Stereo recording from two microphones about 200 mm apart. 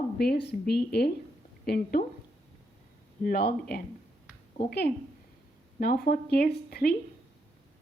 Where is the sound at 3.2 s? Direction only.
50° left (ahead or behind).